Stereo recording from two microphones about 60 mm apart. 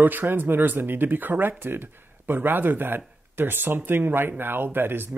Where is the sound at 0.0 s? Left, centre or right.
Right.